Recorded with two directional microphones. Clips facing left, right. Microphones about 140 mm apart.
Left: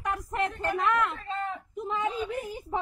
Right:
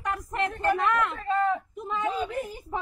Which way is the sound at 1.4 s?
90° right.